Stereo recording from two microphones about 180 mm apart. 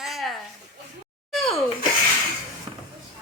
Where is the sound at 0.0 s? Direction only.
Centre (ahead or behind).